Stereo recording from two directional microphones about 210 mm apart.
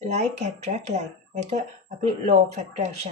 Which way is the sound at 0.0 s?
30° right (ahead or behind).